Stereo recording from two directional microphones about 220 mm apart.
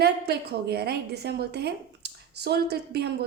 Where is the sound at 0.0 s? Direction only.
45° right (ahead or behind).